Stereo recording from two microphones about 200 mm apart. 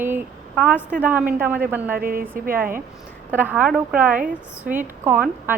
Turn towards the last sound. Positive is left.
turn(degrees=-10)  # may be behind; listen again after turning